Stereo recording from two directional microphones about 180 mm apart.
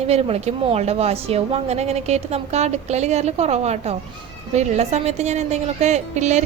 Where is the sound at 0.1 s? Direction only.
35° right (ahead or behind).